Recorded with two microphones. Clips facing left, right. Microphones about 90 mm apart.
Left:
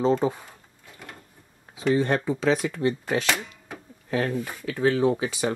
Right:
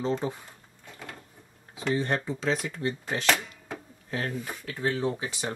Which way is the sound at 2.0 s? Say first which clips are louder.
Left 5 dB; 80° left.